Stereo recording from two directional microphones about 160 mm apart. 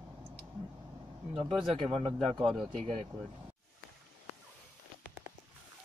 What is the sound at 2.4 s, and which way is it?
Speech, centre (ahead or behind).